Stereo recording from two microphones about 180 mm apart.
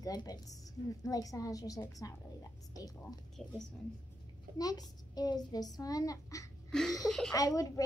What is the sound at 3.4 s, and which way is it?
Speech, centre (ahead or behind).